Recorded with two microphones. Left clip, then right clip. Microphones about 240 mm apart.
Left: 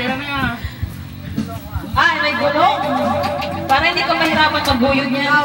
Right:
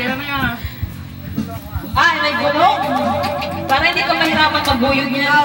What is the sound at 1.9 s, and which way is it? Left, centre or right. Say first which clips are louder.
A woman's voice: right 1 dB; centre.